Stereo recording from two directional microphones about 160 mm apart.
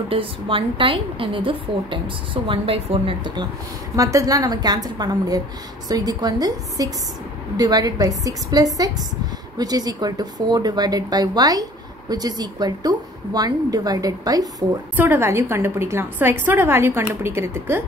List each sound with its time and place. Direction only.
0.1 s a woman's voice: 35° right (ahead or behind)
3.9 s a woman's voice: 20° right (ahead or behind)